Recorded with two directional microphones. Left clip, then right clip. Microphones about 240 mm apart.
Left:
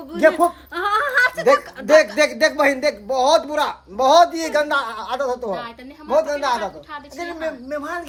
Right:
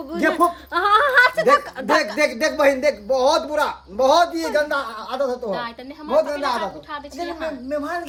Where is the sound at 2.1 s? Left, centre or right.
Centre.